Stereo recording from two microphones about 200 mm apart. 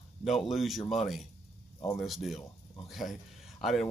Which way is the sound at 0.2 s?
Centre (ahead or behind).